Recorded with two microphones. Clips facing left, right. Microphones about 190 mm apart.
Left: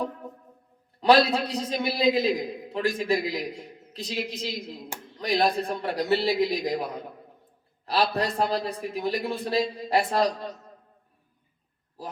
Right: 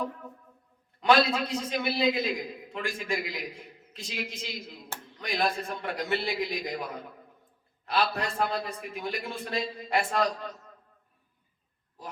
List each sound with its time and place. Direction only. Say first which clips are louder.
1.0 s a man's voice: left 4 dB; 35° left (ahead or behind)
7.9 s a man's voice: left 4 dB; 35° left (ahead or behind)